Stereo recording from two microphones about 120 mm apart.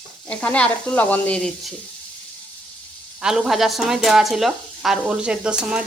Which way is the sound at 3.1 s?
5° right (ahead or behind).